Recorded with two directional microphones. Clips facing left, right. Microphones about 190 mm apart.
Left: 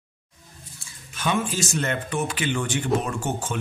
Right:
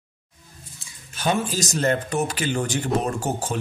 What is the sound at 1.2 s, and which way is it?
A man's voice, 40° right (ahead or behind).